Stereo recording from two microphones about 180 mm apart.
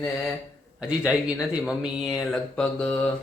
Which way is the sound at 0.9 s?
5° right (ahead or behind).